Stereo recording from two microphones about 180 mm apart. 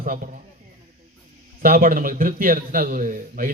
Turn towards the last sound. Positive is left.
turn(degrees=-50)  # may be behind; listen again after turning